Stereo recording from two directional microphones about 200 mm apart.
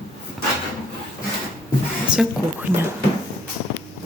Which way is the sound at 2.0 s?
5° right (ahead or behind).